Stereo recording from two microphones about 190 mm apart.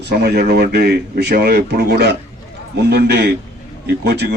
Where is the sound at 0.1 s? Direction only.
55° right (ahead or behind).